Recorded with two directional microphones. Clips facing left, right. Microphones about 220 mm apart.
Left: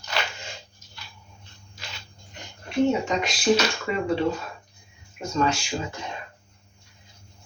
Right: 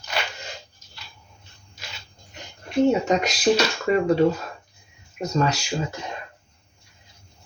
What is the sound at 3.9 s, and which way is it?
Speech, 40° right (ahead or behind).